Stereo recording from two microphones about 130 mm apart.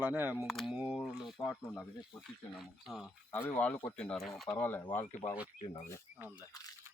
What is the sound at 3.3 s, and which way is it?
Speech, 15° left (ahead or behind).